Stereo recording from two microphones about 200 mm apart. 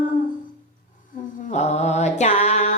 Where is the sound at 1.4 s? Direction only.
35° left (ahead or behind).